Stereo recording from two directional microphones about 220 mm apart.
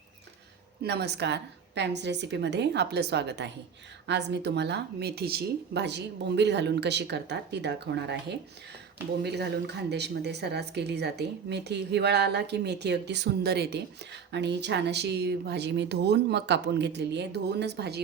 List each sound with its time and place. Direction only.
0.8 s speech: 50° right (ahead or behind)